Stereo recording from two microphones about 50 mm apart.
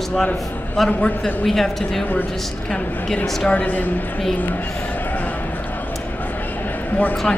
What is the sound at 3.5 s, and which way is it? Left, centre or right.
Speech, left.